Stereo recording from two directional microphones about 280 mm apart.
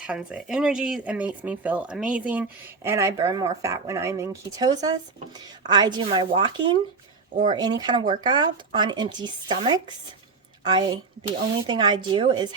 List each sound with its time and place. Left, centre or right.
0.1 s a woman's voice: centre